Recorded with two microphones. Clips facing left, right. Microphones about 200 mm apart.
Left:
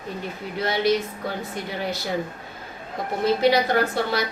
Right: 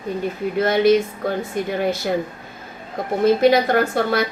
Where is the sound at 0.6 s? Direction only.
50° right (ahead or behind).